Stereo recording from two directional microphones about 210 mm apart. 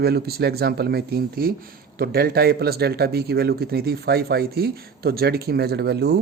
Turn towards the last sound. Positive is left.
turn(degrees=-50)  # may be behind; listen again after turning